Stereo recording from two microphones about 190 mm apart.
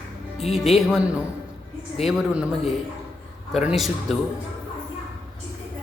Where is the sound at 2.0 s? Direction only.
Centre (ahead or behind).